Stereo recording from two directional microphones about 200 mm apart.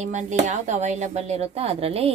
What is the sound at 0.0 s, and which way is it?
A woman's voice, 35° right (ahead or behind).